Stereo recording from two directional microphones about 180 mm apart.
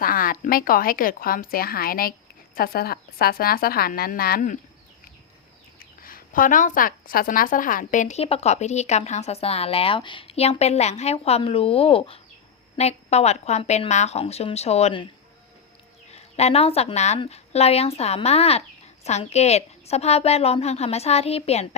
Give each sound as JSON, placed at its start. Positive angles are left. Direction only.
{"t": 0.0, "sound": "a woman's voice", "side_deg": 55}
{"t": 5.8, "sound": "speech", "side_deg": 50}
{"t": 16.1, "sound": "speech", "side_deg": 35}